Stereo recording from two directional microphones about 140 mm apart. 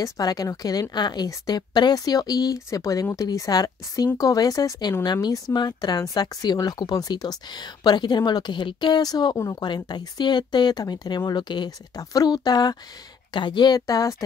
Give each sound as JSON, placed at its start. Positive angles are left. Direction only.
{"t": 0.0, "sound": "a woman's voice", "side_deg": 25}